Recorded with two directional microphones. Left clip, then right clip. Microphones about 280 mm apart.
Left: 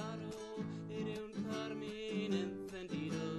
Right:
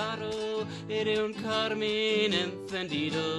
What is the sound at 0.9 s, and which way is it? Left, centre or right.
Music, right.